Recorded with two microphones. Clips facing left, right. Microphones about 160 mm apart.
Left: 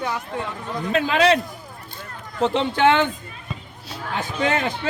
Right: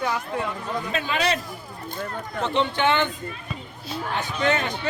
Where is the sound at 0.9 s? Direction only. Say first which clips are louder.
Left 8 dB; 90° left.